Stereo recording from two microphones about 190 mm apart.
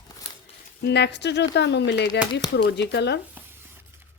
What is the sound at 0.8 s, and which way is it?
A woman's voice, 60° left (ahead or behind).